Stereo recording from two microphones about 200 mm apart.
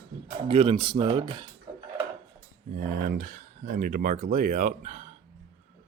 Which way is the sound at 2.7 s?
50° right (ahead or behind).